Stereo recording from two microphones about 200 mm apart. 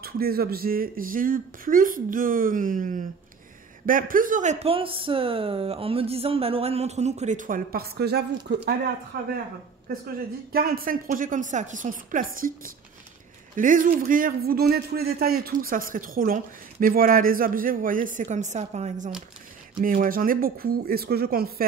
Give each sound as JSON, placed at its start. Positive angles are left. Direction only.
{"t": 0.0, "sound": "speech", "side_deg": -50}
{"t": 10.5, "sound": "speech", "side_deg": -50}
{"t": 13.6, "sound": "speech", "side_deg": -40}